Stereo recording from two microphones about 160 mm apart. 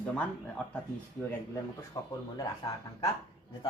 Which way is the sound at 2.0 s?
20° left (ahead or behind).